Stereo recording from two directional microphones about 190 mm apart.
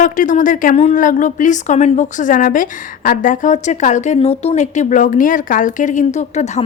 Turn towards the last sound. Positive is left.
turn(degrees=35)  # may be behind; listen again after turning